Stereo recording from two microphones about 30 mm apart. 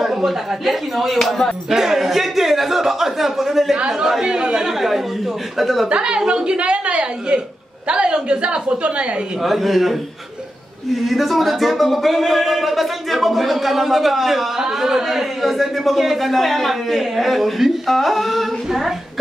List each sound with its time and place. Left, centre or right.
0.0 s speech: centre
4.2 s speech: right
5.6 s speech: centre
5.9 s a woman's voice: right
9.4 s speech: centre
11.1 s speech: centre
14.6 s speech: centre
15.0 s speech: centre